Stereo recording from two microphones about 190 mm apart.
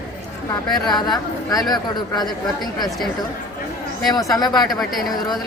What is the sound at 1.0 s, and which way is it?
A woman's voice, 20° left (ahead or behind).